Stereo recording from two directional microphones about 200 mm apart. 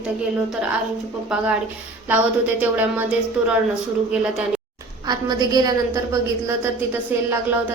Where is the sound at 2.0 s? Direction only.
10° right (ahead or behind).